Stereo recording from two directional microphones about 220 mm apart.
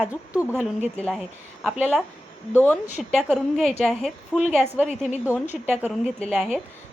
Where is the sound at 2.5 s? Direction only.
10° left (ahead or behind).